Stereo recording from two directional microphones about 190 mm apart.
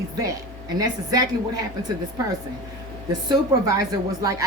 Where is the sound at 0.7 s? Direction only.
20° right (ahead or behind).